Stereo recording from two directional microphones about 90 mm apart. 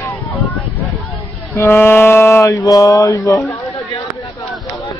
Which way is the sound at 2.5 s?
40° left (ahead or behind).